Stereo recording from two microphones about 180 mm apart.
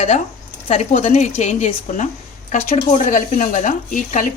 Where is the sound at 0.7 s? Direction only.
40° left (ahead or behind).